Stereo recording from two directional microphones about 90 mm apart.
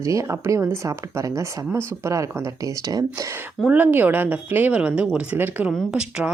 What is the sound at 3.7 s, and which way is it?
Speech, 20° right (ahead or behind).